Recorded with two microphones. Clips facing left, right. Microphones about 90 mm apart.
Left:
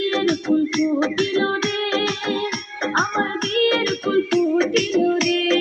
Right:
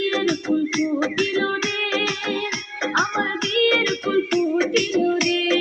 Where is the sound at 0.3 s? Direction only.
20° left (ahead or behind).